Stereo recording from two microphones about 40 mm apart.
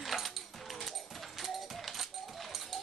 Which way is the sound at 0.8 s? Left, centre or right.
Centre.